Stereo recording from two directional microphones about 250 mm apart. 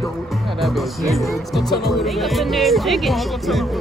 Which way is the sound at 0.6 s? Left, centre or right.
Centre.